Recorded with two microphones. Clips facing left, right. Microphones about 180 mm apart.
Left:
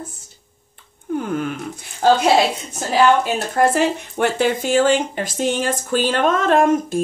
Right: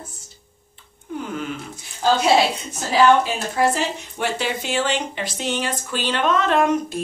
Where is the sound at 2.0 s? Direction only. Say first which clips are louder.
Left 4 dB; 55° left (ahead or behind).